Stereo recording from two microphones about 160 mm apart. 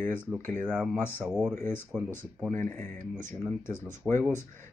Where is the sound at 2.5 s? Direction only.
10° left (ahead or behind).